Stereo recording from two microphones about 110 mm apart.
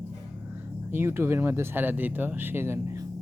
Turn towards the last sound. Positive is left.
turn(degrees=-25)  # may be behind; listen again after turning